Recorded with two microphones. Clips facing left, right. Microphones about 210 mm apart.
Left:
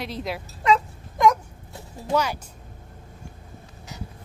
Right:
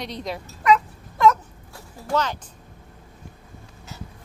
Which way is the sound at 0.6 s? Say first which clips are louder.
Right 2 dB; 25° left (ahead or behind).